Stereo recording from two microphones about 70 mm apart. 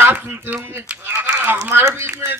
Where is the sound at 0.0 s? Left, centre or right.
Right.